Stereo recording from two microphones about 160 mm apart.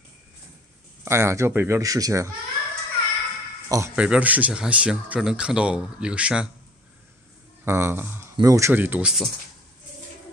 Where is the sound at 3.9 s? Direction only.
10° right (ahead or behind).